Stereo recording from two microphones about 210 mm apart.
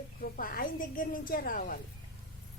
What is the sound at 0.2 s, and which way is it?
A woman's voice, 45° left (ahead or behind).